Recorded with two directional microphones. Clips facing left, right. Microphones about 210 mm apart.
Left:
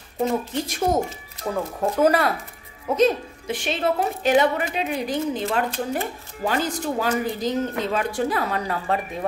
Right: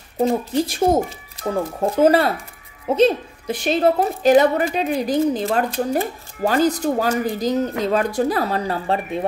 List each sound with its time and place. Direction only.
0.2 s a woman's voice: 35° right (ahead or behind)